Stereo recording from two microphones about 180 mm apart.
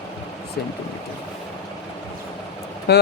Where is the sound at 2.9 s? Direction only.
70° left (ahead or behind).